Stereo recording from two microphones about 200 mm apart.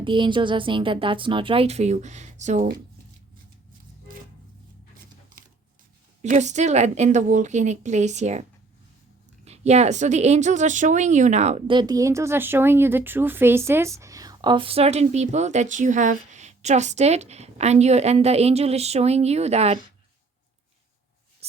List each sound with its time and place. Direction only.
0.0 s a woman's voice: 25° right (ahead or behind)
6.2 s a woman's voice: 35° right (ahead or behind)